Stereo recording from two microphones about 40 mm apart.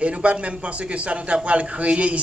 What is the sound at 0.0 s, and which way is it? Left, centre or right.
A man's voice, right.